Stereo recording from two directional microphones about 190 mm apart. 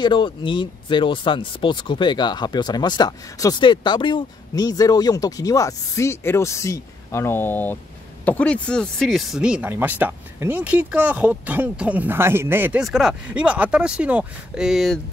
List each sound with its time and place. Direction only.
0.0 s speech: 25° left (ahead or behind); by 15.0 s centre (ahead or behind)